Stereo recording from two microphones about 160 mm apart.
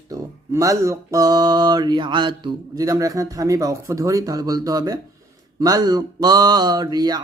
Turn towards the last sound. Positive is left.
turn(degrees=-25)  # may be behind; listen again after turning